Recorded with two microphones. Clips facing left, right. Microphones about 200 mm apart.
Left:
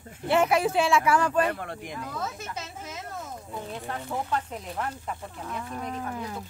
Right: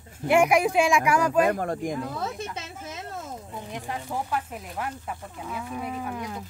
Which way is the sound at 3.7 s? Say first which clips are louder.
Right 2 dB; 15° right (ahead or behind).